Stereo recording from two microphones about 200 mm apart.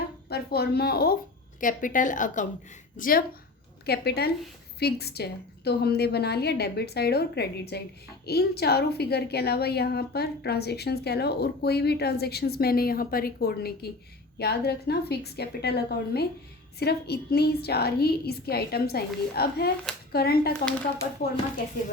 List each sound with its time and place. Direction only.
0.3 s a woman's voice: 50° left (ahead or behind)